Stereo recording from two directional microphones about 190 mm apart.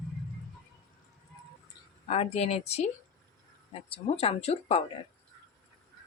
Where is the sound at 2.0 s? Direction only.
35° left (ahead or behind).